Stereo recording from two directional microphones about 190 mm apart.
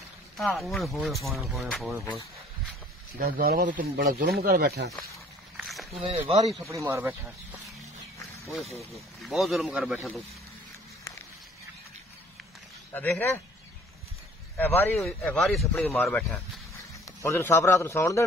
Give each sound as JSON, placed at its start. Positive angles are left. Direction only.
{"t": 0.4, "sound": "speech", "side_deg": 0}
{"t": 3.2, "sound": "speech", "side_deg": -55}
{"t": 5.6, "sound": "a sound", "side_deg": 0}
{"t": 6.0, "sound": "speech", "side_deg": -35}
{"t": 6.7, "sound": "speech", "side_deg": -15}
{"t": 8.9, "sound": "speech", "side_deg": 0}
{"t": 12.9, "sound": "speech", "side_deg": 10}
{"t": 14.6, "sound": "speech", "side_deg": 10}
{"t": 15.9, "sound": "a man's voice", "side_deg": 10}